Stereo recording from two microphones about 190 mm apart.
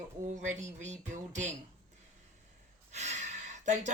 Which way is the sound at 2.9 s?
35° right (ahead or behind).